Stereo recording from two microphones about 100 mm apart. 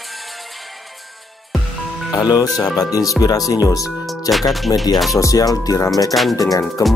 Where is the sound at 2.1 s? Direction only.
40° left (ahead or behind).